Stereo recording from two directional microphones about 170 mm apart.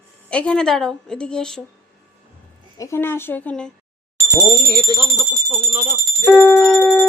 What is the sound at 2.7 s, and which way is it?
Speech, 20° left (ahead or behind).